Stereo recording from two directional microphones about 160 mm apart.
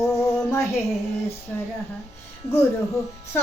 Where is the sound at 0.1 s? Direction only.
15° left (ahead or behind).